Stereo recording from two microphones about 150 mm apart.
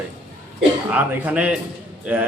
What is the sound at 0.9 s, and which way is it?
A man's voice, 10° right (ahead or behind).